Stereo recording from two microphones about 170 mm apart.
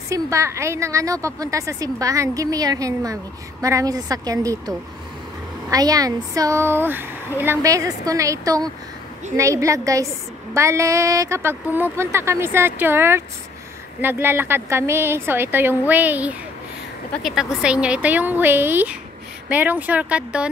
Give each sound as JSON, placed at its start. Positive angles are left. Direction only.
{"t": 0.1, "sound": "a woman's voice", "side_deg": -15}